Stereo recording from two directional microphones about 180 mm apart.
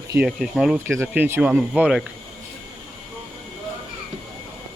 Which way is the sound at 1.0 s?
15° right (ahead or behind).